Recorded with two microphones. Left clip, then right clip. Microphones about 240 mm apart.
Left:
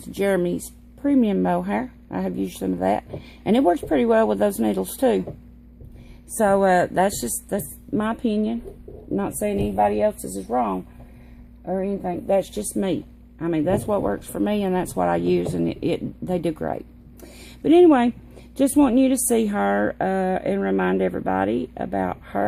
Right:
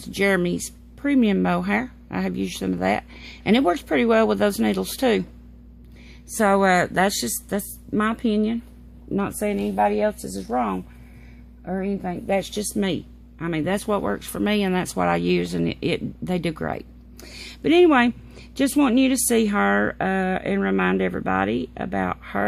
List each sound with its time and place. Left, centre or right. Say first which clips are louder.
0.1 s speech: even; right
6.3 s speech: left 1 dB; right